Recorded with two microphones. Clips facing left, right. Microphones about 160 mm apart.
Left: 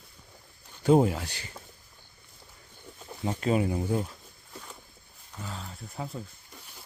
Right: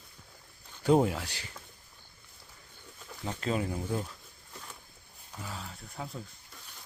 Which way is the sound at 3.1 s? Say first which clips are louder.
Left 6 dB; 15° left (ahead or behind).